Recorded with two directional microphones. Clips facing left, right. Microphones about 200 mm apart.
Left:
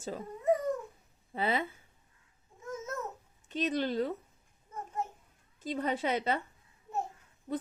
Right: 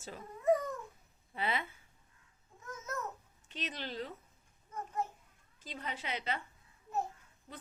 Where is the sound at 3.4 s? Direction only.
45° left (ahead or behind).